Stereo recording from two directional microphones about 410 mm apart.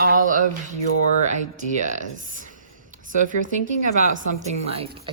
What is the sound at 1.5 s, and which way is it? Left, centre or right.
Speech, centre.